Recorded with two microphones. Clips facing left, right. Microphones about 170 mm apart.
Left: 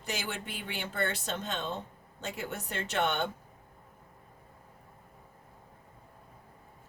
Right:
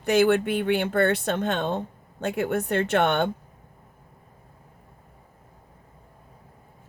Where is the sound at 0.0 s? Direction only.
60° right (ahead or behind).